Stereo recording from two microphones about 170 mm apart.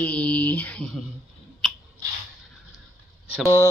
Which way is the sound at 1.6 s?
5° left (ahead or behind).